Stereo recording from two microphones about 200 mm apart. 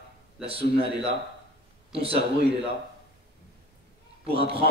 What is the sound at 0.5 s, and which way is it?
Speech, 30° right (ahead or behind).